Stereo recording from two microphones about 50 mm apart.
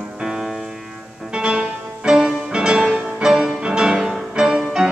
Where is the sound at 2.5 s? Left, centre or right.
Centre.